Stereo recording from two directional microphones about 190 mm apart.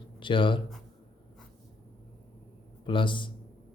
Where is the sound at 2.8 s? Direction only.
25° left (ahead or behind).